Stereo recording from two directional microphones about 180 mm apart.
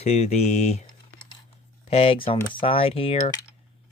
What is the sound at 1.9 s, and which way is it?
Speech, 35° left (ahead or behind).